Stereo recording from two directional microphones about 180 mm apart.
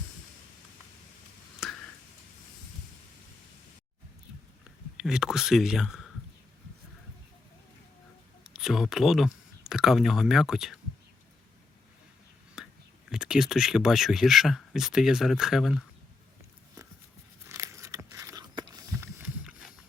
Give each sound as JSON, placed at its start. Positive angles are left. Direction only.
{"t": 1.6, "sound": "a sound", "side_deg": 5}
{"t": 4.9, "sound": "speech", "side_deg": -5}
{"t": 8.4, "sound": "speech", "side_deg": -5}
{"t": 12.6, "sound": "whispering", "side_deg": 0}
{"t": 13.1, "sound": "speech", "side_deg": -5}
{"t": 17.5, "sound": "biting", "side_deg": -15}